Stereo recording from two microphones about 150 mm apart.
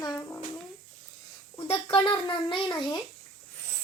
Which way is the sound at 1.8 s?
35° left (ahead or behind).